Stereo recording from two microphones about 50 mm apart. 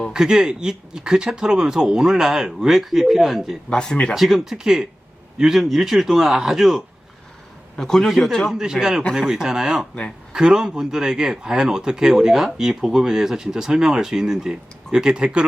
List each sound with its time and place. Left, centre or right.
0.1 s speech: centre
3.7 s speech: centre
4.1 s a man's voice: centre
7.8 s a man's voice: centre
8.5 s speech: centre